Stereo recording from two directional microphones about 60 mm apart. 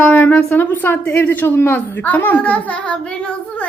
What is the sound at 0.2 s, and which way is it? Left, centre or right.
A child's voice, left.